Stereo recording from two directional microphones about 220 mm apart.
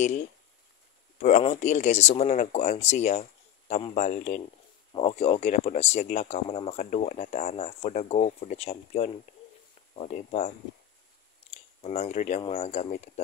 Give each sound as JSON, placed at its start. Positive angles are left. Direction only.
{"t": 1.1, "sound": "speech", "side_deg": 30}
{"t": 11.5, "sound": "speech", "side_deg": 30}